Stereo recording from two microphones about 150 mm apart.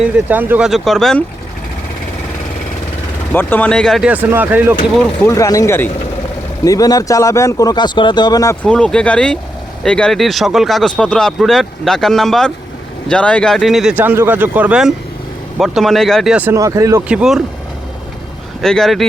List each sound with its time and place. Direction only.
0.0 s speech: 10° right (ahead or behind)
0.7 s speech: centre (ahead or behind)
3.3 s speech: 10° left (ahead or behind)
4.0 s speech: 10° right (ahead or behind)
5.2 s speech: 20° left (ahead or behind)
8.6 s speech: 5° left (ahead or behind)
13.9 s speech: 15° right (ahead or behind)
16.6 s speech: 20° right (ahead or behind)
17.1 s speech: 5° right (ahead or behind)
18.6 s speech: 5° left (ahead or behind)